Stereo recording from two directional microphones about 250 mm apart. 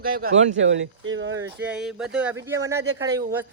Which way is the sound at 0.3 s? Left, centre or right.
Right.